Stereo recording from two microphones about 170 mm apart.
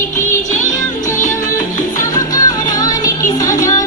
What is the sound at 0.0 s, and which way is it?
Music, 15° left (ahead or behind).